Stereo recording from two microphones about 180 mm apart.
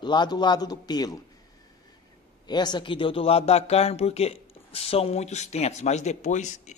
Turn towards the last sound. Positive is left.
turn(degrees=40)  # may be behind; listen again after turning